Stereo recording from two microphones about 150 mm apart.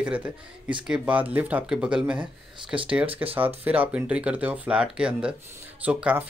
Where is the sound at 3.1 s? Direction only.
40° right (ahead or behind).